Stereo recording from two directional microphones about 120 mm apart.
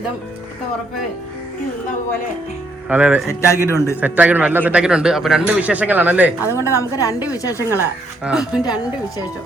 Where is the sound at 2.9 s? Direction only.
10° right (ahead or behind).